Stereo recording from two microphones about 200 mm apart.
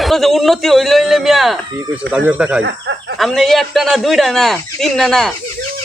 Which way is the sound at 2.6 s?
60° right (ahead or behind).